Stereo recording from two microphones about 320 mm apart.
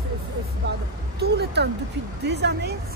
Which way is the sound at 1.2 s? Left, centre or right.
Right.